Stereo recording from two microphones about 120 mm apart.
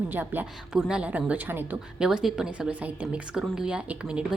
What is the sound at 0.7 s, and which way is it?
A woman's voice, 5° right (ahead or behind).